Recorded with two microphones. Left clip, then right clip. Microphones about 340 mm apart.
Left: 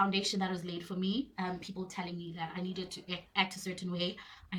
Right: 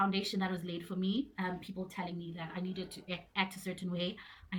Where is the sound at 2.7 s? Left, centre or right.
Left.